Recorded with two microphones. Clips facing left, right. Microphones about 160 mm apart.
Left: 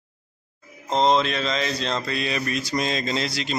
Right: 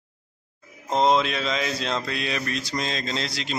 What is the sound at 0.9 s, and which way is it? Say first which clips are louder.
A man's voice: left 1 dB; 5° right (ahead or behind).